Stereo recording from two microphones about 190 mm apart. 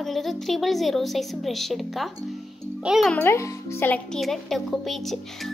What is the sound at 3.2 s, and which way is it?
Speech, 15° left (ahead or behind).